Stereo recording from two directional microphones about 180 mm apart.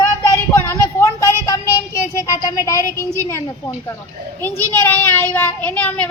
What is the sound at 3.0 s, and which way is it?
A woman's voice, 15° left (ahead or behind).